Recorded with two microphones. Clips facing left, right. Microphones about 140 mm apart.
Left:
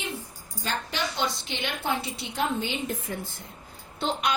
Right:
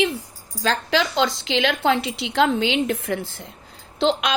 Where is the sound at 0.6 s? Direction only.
90° right.